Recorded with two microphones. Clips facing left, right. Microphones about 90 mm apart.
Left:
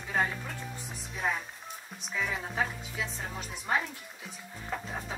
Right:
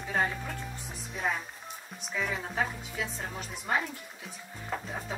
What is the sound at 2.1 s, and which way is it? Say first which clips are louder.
Speech: right 1 dB; centre (ahead or behind).